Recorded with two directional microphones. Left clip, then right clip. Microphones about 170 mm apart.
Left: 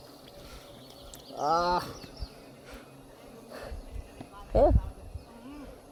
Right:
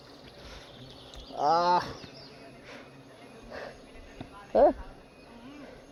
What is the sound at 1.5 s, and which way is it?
Speech, 60° left (ahead or behind).